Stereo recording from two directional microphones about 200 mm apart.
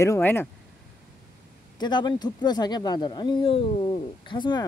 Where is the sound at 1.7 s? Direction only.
20° left (ahead or behind).